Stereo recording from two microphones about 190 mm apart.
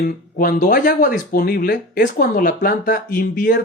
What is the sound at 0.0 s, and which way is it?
Speech, 45° left (ahead or behind).